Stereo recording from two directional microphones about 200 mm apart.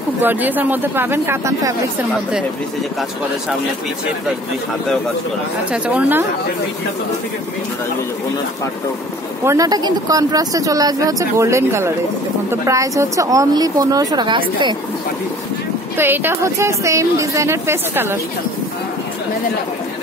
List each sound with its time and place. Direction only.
0.2 s speech: 10° right (ahead or behind)
5.7 s speech: 10° right (ahead or behind)
9.4 s speech: 15° right (ahead or behind)
16.0 s speech: 10° right (ahead or behind)